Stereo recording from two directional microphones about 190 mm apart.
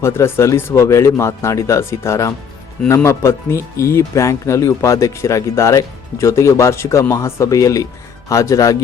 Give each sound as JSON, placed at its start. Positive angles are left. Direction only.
{"t": 0.0, "sound": "speech", "side_deg": 15}